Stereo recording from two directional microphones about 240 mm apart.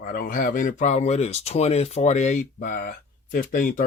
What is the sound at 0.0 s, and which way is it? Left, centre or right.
Speech, left.